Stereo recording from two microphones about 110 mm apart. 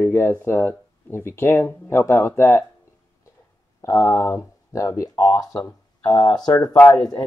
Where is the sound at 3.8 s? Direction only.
25° left (ahead or behind).